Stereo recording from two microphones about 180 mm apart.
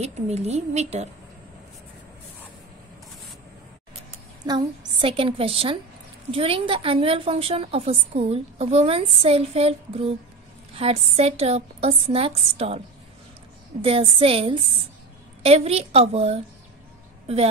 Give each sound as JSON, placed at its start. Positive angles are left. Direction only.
{"t": 0.0, "sound": "a woman's voice", "side_deg": -40}
{"t": 4.5, "sound": "a woman's voice", "side_deg": -25}